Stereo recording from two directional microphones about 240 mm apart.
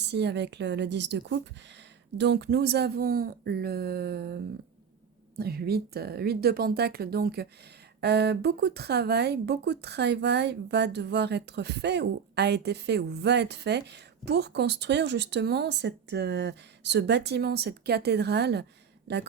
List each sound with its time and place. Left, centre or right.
0.0 s speech: right
5.4 s speech: right